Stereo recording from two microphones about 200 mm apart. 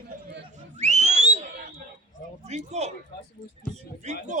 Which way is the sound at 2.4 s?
35° right (ahead or behind).